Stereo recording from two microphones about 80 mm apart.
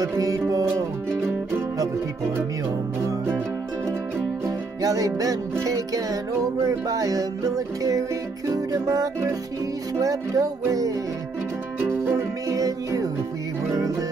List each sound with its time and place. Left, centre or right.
0.0 s music: right
4.8 s music: right
6.9 s music: right
11.8 s music: right
12.4 s music: right